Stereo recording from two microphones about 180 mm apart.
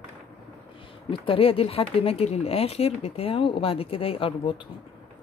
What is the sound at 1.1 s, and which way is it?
Speech, 30° left (ahead or behind).